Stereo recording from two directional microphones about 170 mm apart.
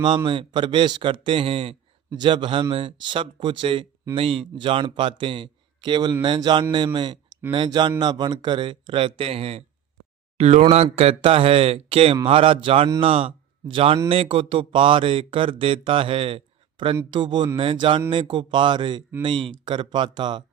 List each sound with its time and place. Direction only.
0.3 s a man's voice: 30° right (ahead or behind)